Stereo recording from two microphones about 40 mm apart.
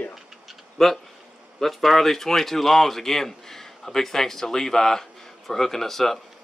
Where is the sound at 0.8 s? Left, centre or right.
Centre.